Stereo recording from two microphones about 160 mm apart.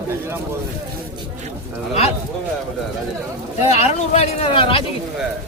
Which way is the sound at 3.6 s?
40° left (ahead or behind).